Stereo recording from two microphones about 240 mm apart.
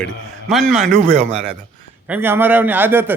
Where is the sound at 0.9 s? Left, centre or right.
Right.